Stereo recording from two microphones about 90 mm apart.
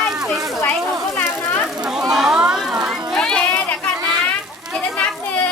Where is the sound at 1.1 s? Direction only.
25° left (ahead or behind).